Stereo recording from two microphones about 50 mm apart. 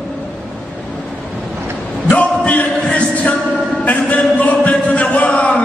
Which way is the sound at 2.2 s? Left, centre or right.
Left.